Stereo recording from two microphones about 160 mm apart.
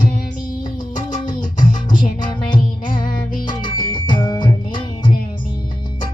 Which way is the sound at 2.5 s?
30° left (ahead or behind).